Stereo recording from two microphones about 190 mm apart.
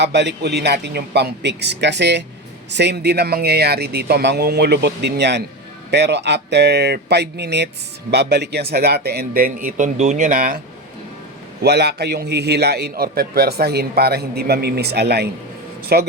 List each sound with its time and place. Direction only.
0.0 s a man's voice: 65° right (ahead or behind); by 10.6 s 50° right (ahead or behind)
11.6 s a man's voice: 60° right (ahead or behind)